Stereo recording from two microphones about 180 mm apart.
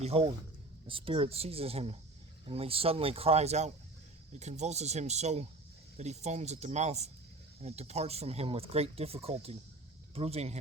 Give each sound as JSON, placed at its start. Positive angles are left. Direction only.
{"t": 0.0, "sound": "speech", "side_deg": -35}